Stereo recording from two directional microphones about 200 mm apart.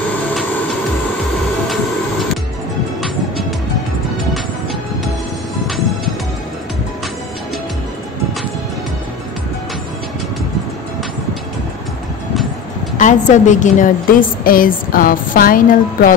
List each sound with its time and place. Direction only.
3.0 s music: centre (ahead or behind)
12.9 s a woman's voice: 40° left (ahead or behind)